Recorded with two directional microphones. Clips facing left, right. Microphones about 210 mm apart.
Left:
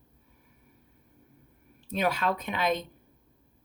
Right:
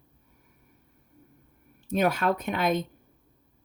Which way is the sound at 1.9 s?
45° right (ahead or behind).